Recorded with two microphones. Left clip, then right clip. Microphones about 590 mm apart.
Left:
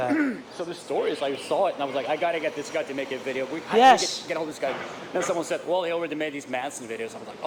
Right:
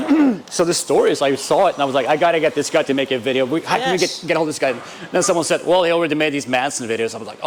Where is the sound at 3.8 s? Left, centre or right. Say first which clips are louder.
Left 2 dB; left.